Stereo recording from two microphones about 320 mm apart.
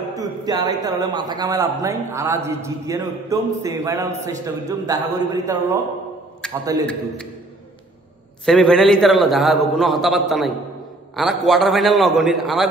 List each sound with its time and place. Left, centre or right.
0.1 s a man's voice: centre
8.5 s a man's voice: centre